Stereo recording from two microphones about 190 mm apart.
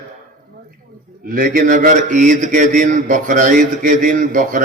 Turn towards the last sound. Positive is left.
turn(degrees=-45)  # may be behind; listen again after turning